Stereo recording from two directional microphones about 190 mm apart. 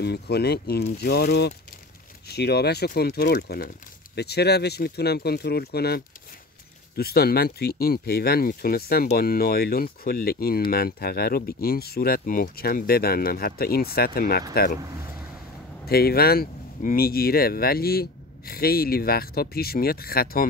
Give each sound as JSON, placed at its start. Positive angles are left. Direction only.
{"t": 0.0, "sound": "speech", "side_deg": 60}
{"t": 15.9, "sound": "speech", "side_deg": 55}